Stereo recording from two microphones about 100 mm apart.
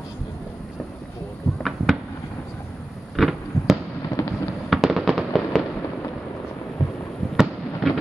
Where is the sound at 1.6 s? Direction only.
5° right (ahead or behind).